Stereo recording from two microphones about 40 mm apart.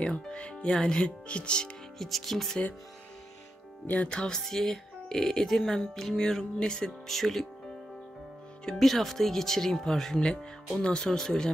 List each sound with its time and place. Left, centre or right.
0.0 s speech: left
2.0 s speech: centre
4.1 s speech: centre
7.1 s speech: centre
8.7 s speech: centre